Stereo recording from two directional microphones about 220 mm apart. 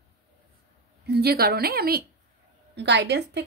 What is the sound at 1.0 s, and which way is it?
A woman's voice, 45° right (ahead or behind).